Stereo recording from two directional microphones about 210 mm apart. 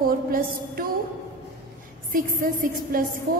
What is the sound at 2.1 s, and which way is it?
Speech, 40° right (ahead or behind).